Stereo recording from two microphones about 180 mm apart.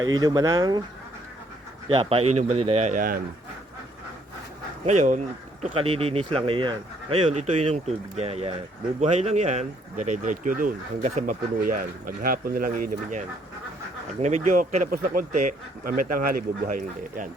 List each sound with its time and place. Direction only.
0.2 s speech: 20° right (ahead or behind)
1.9 s speech: 30° right (ahead or behind); by 3.2 s 50° right (ahead or behind)
4.9 s speech: 45° right (ahead or behind)
5.8 s speech: 35° right (ahead or behind); by 17.2 s 50° right (ahead or behind)